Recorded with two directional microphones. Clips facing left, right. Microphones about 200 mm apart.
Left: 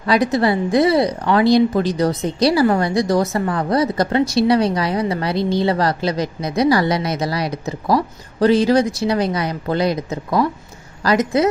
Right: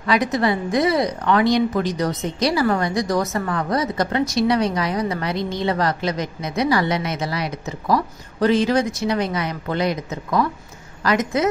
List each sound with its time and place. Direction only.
0.0 s a woman's voice: 35° left (ahead or behind)